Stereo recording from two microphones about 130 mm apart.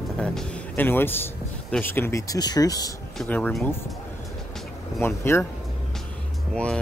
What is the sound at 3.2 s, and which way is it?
Speech, 10° left (ahead or behind).